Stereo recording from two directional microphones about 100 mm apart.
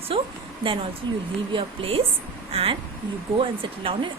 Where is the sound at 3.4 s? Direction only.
65° right (ahead or behind).